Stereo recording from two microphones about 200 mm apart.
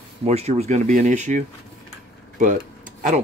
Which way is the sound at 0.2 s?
30° right (ahead or behind).